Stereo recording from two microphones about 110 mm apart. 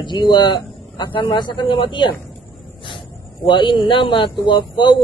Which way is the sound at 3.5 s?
45° left (ahead or behind).